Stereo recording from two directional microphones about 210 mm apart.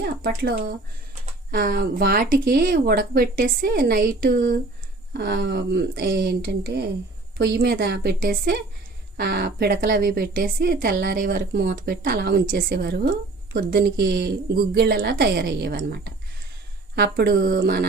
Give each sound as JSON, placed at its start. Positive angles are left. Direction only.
{"t": 0.2, "sound": "speech", "side_deg": -45}
{"t": 16.9, "sound": "speech", "side_deg": -50}